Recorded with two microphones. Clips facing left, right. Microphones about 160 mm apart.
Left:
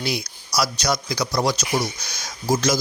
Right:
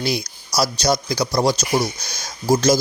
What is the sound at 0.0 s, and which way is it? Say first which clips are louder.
Speech: right 3 dB; 35° right (ahead or behind).